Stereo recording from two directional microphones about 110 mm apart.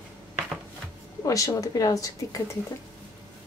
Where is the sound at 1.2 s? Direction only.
30° left (ahead or behind).